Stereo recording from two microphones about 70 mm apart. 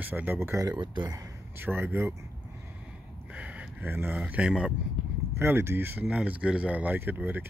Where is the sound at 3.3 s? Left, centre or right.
Centre.